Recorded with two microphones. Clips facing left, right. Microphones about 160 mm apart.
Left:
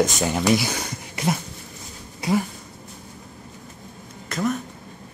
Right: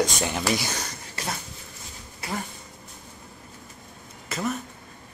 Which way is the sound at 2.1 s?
15° left (ahead or behind).